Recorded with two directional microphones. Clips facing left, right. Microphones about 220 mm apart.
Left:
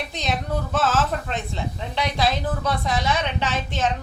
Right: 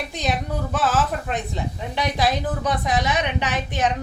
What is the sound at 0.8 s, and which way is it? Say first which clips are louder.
A woman's voice: even; 15° right (ahead or behind).